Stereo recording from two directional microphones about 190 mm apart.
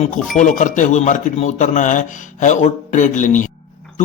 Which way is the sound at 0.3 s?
40° left (ahead or behind).